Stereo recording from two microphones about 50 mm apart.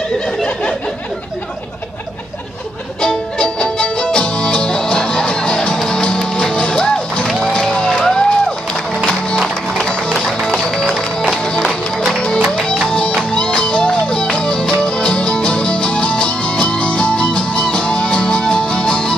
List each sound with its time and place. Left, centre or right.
3.0 s music: centre